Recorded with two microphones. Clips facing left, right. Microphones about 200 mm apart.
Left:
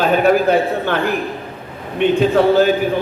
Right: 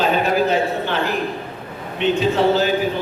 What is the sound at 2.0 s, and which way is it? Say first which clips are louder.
Speech: left 4 dB; 50° left (ahead or behind).